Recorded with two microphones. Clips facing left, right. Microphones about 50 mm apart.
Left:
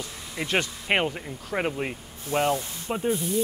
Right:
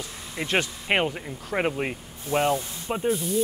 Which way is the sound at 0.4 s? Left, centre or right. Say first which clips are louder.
Even; centre.